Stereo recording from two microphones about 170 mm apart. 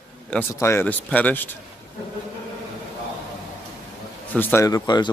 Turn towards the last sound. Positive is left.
turn(degrees=25)  # may be behind; listen again after turning